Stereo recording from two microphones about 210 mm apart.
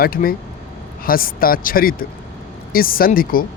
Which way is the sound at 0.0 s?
45° left (ahead or behind).